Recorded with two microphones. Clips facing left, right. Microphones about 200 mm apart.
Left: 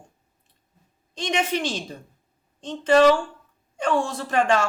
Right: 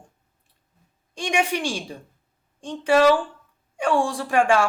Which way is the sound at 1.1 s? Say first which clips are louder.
Right 1 dB; 10° right (ahead or behind).